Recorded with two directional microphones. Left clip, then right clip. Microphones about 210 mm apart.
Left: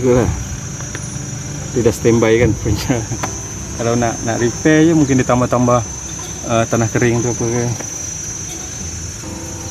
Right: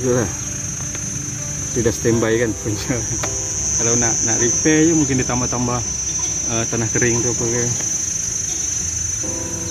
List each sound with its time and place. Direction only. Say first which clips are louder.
0.0 s speech: left 5 dB; 25° left (ahead or behind)
1.9 s speech: left 6 dB; 25° left (ahead or behind)
3.8 s speech: left 3 dB; 50° left (ahead or behind)